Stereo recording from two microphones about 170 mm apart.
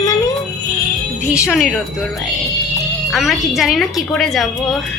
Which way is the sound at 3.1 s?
Centre (ahead or behind).